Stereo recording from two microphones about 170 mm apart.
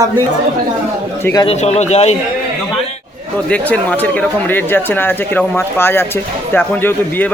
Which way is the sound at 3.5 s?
5° left (ahead or behind).